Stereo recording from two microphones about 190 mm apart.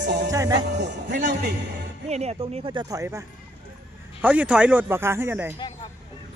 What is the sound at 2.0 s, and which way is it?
Speech, 35° right (ahead or behind).